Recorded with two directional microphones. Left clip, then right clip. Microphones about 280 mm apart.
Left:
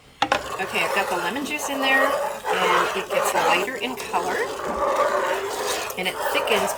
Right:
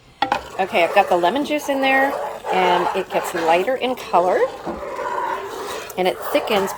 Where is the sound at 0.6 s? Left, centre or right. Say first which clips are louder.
Right 7 dB; centre.